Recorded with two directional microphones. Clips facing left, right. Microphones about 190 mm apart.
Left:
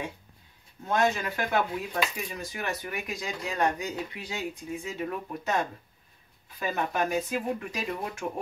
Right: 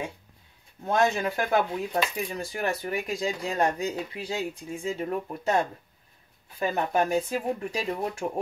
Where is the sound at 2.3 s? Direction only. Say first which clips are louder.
Right 4 dB; 30° right (ahead or behind).